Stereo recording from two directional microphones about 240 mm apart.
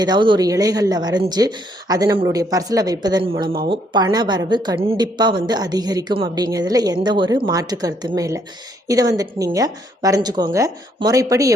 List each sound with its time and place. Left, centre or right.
0.0 s a woman's voice: centre